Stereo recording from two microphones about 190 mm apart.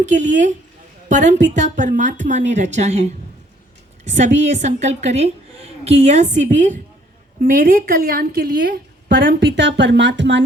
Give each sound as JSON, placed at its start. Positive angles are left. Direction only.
{"t": 0.0, "sound": "a woman's voice", "side_deg": -40}